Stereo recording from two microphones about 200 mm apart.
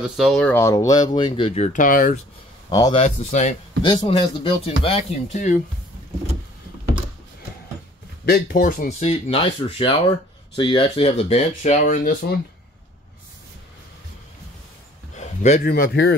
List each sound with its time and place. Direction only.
0.0 s speech: centre (ahead or behind); by 2.1 s 45° left (ahead or behind)
2.7 s speech: 20° left (ahead or behind)
3.0 s speech: 35° left (ahead or behind)
3.8 s speech: 25° left (ahead or behind)
8.3 s speech: 45° left (ahead or behind)
9.1 s speech: 30° left (ahead or behind); by 12.4 s 45° left (ahead or behind)
15.1 s speech: 35° left (ahead or behind); by 16.2 s 55° left (ahead or behind)